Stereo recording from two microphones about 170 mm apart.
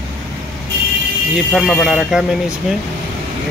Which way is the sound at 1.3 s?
Centre (ahead or behind).